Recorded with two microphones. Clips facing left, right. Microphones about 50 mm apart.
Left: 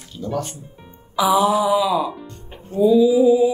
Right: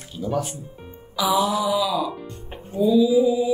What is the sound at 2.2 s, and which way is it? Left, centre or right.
Music, centre.